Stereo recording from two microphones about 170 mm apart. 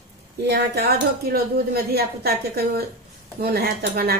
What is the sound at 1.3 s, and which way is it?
A woman's voice, 65° right (ahead or behind).